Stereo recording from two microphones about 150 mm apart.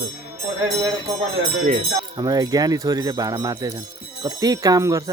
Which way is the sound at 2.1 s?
25° right (ahead or behind).